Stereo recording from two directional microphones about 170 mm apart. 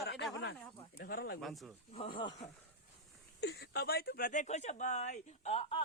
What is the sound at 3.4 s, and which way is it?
Speech, 70° left (ahead or behind).